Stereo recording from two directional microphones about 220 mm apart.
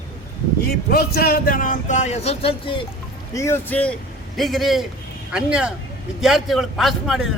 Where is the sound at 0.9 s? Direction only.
45° left (ahead or behind); by 2.8 s 25° left (ahead or behind).